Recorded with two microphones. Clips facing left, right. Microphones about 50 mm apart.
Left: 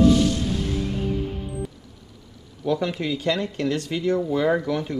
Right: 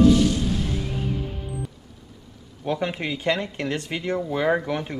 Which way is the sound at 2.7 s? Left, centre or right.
Right.